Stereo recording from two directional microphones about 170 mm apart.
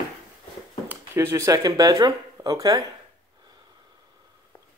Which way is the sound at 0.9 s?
15° right (ahead or behind).